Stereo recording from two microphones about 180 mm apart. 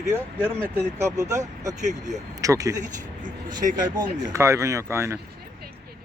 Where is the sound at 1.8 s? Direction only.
40° right (ahead or behind).